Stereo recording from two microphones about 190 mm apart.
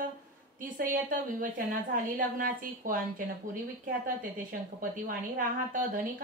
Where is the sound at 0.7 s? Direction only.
45° right (ahead or behind).